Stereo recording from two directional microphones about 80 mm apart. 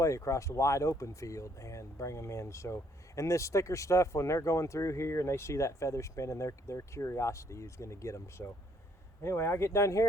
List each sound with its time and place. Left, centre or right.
0.0 s speech: left